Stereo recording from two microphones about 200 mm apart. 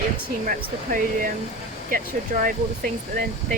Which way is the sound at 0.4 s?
45° right (ahead or behind).